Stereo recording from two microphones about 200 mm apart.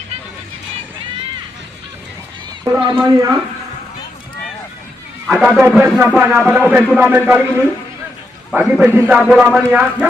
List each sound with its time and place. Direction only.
2.6 s speech: 20° right (ahead or behind)
5.3 s a man's voice: 5° right (ahead or behind)
8.5 s a man's voice: 5° right (ahead or behind)